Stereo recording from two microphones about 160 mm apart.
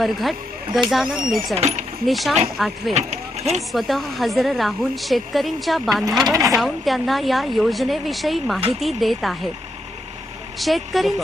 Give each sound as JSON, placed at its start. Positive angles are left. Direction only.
{"t": 0.0, "sound": "a woman's voice", "side_deg": 0}
{"t": 1.5, "sound": "speech", "side_deg": -45}
{"t": 2.0, "sound": "a woman's voice", "side_deg": 0}
{"t": 2.9, "sound": "a sound", "side_deg": -45}
{"t": 3.7, "sound": "a woman's voice", "side_deg": 0}
{"t": 6.1, "sound": "speech", "side_deg": -20}
{"t": 6.6, "sound": "a woman's voice", "side_deg": 0}
{"t": 10.6, "sound": "a woman's voice", "side_deg": 0}